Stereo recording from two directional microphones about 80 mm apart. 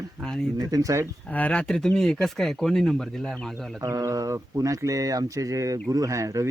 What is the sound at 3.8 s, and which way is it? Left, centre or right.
Speech, right.